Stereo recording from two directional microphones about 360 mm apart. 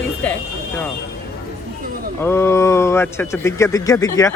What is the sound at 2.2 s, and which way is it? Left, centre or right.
Speech, centre.